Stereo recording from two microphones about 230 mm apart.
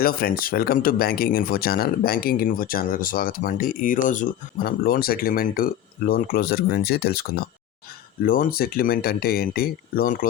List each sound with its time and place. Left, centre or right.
0.0 s speech: left